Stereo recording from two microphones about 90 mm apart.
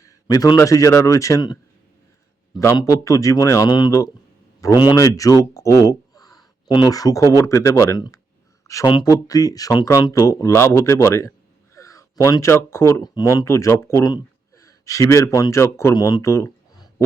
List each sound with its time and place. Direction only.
0.0 s a sound: 45° left (ahead or behind)
0.6 s speech: 35° left (ahead or behind)
2.7 s speech: 40° left (ahead or behind)
3.7 s speech: 50° left (ahead or behind)
4.6 s speech: 40° left (ahead or behind)
4.9 s a sound: 40° left (ahead or behind)
6.9 s speech: 40° left (ahead or behind)
14.0 s speech: 40° left (ahead or behind)
16.0 s speech: 45° left (ahead or behind)
16.2 s speech: 30° left (ahead or behind)